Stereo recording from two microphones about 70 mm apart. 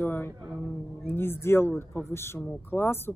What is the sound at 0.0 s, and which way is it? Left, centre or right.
Music, left.